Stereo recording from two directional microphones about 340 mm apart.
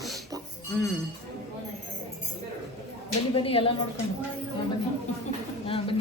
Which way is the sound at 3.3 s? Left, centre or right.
Centre.